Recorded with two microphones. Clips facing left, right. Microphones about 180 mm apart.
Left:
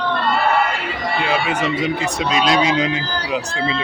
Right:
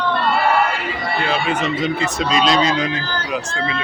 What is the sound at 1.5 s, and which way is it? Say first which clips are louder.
Speech: even; 10° left (ahead or behind).